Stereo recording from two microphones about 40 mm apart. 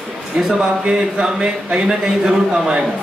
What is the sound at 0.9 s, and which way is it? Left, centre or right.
A man's voice, right.